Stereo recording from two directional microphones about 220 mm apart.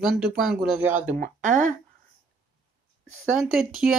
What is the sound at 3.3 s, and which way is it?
Speech, centre (ahead or behind).